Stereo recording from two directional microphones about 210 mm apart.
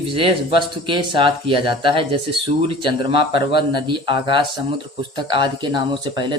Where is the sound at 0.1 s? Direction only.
25° right (ahead or behind).